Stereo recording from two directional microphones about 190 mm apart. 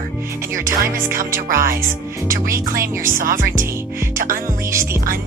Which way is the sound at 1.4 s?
50° right (ahead or behind).